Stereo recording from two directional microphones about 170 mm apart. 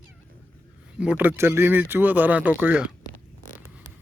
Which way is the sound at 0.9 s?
10° right (ahead or behind).